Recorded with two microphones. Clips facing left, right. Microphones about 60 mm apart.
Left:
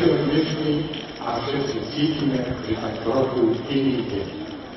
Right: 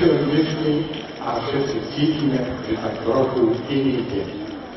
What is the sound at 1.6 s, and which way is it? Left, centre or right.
A man's voice, centre.